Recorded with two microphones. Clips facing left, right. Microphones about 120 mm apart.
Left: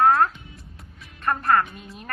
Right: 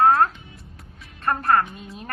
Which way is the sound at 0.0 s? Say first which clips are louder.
Right 1 dB; 35° right (ahead or behind).